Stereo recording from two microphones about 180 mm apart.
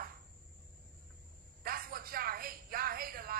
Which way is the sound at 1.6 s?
55° right (ahead or behind).